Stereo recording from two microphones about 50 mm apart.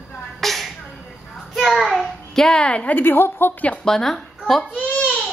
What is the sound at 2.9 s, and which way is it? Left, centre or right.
Speech, left.